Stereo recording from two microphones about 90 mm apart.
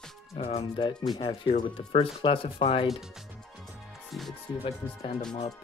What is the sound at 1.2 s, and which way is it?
Speech, 75° left (ahead or behind).